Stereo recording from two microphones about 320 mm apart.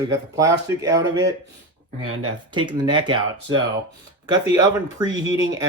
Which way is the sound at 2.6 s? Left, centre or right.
Centre.